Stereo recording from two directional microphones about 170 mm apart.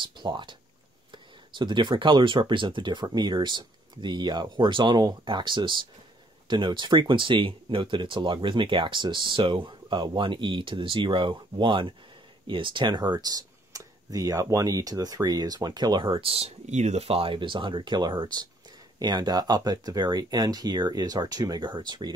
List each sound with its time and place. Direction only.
0.0 s speech: 30° right (ahead or behind)